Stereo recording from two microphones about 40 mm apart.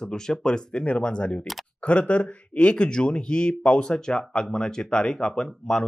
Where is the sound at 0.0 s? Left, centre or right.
Centre.